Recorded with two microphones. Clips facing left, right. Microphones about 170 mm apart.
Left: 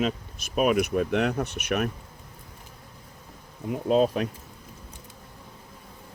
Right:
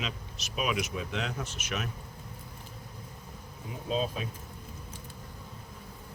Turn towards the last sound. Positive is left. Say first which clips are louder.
# left 10 dB
turn(degrees=65)  # may be behind; listen again after turning